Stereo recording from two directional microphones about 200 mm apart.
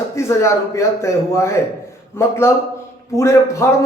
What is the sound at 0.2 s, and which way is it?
Speech, 15° left (ahead or behind).